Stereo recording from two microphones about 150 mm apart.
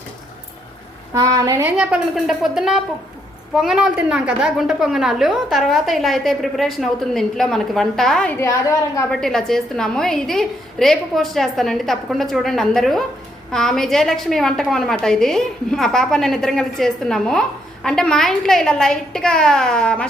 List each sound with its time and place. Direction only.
1.1 s a woman's voice: 25° right (ahead or behind)
1.6 s a woman's voice: 10° right (ahead or behind); by 8.5 s 15° left (ahead or behind)
9.1 s a woman's voice: 5° left (ahead or behind)